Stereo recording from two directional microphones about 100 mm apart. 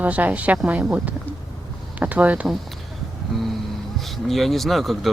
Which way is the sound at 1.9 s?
15° right (ahead or behind).